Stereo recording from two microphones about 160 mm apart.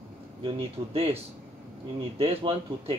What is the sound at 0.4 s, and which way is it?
Speech, 35° right (ahead or behind).